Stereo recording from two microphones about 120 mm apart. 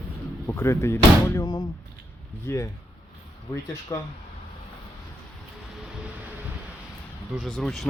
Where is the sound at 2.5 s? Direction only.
20° left (ahead or behind).